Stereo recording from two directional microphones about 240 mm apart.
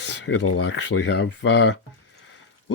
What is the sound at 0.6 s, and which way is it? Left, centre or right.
Speech, left.